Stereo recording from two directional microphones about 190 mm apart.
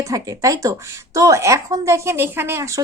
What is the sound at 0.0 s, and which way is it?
Speech, 15° right (ahead or behind).